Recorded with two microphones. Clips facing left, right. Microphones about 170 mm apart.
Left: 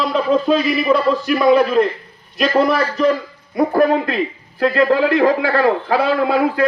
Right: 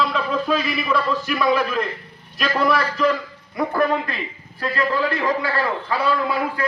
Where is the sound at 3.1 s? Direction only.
40° left (ahead or behind); by 6.7 s 65° left (ahead or behind).